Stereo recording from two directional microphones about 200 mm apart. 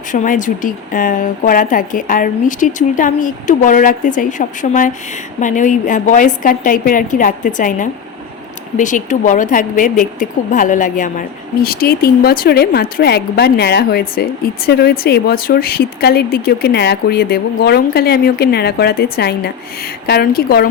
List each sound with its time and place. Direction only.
0.1 s a woman's voice: 40° left (ahead or behind)